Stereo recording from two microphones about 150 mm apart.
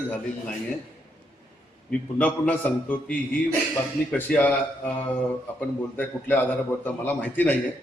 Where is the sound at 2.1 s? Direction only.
10° left (ahead or behind).